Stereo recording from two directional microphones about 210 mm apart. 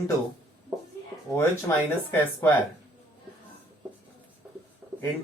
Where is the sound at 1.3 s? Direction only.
10° left (ahead or behind).